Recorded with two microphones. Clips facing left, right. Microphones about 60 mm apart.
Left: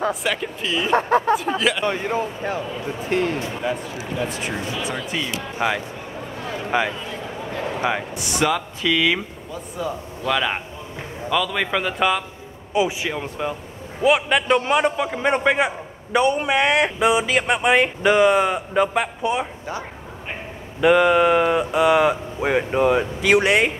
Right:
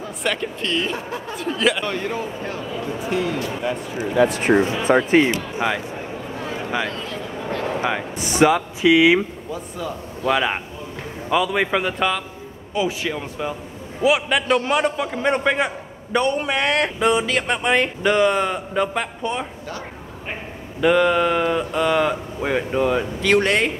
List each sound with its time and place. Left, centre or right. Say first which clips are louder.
0.1 s speech: even; centre
0.9 s speech: left 11 dB; left
1.6 s speech: right 1 dB; centre
1.9 s a man's voice: left 2 dB; centre
3.0 s speech: left 2 dB; left
3.6 s speech: left 1 dB; centre
4.2 s speech: right 10 dB; right
4.6 s speech: right 10 dB; right
5.6 s speech: left 1 dB; centre
6.7 s a sound: left 5 dB; centre
8.1 s a man's voice: right 5 dB; right
10.2 s a man's voice: right 2 dB; centre
12.7 s a man's voice: left 1 dB; centre
20.8 s a man's voice: left 2 dB; centre